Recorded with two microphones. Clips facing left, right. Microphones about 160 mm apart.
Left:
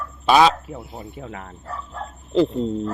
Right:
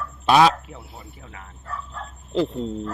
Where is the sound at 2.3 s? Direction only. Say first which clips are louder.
Left 4 dB; centre (ahead or behind).